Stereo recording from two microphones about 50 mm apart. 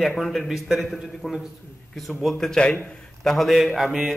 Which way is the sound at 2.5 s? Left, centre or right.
Left.